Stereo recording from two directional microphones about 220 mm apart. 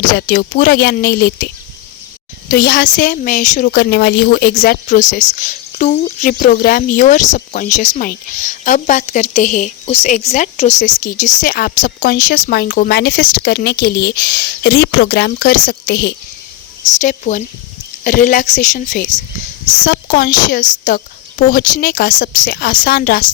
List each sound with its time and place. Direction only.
0.1 s speech: 40° left (ahead or behind)
2.5 s speech: 45° left (ahead or behind)
3.7 s speech: 50° left (ahead or behind)
17.0 s speech: 35° left (ahead or behind)